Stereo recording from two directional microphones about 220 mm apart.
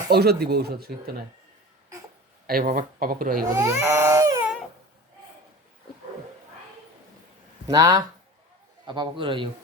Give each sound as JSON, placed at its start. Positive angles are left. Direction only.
{"t": 0.1, "sound": "speech", "side_deg": -45}
{"t": 2.5, "sound": "speech", "side_deg": -40}
{"t": 3.5, "sound": "baby cry", "side_deg": -15}
{"t": 7.7, "sound": "a man's voice", "side_deg": -15}